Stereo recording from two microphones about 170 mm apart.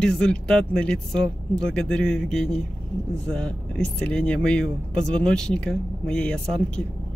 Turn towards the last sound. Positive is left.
turn(degrees=5)  # may be behind; listen again after turning